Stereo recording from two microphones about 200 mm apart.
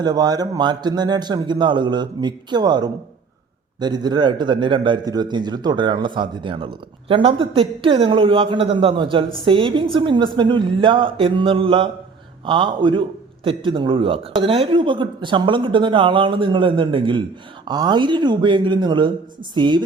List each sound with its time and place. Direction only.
0.0 s a man's voice: 20° right (ahead or behind)